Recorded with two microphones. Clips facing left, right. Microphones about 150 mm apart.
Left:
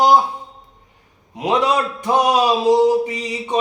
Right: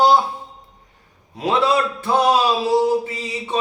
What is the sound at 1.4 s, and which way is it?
A man's voice, 15° left (ahead or behind).